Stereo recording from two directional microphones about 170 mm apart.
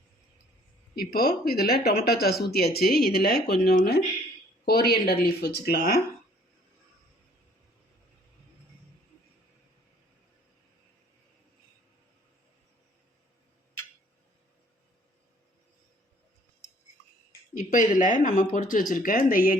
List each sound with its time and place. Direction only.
0.9 s speech: 65° left (ahead or behind)
17.7 s speech: 50° left (ahead or behind)